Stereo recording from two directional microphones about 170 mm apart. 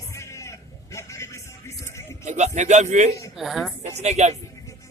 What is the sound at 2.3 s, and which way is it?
Speech, 45° right (ahead or behind).